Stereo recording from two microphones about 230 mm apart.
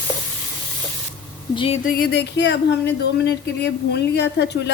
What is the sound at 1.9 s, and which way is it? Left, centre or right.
Speech, left.